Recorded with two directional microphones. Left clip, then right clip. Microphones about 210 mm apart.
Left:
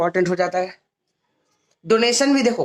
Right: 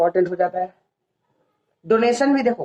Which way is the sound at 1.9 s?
25° left (ahead or behind).